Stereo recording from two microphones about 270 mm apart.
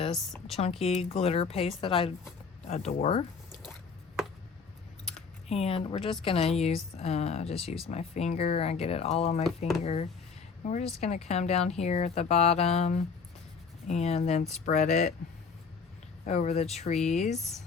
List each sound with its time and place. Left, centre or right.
0.1 s speech: centre
0.8 s speech: left
5.0 s a sound: left
6.2 s speech: left
16.2 s speech: left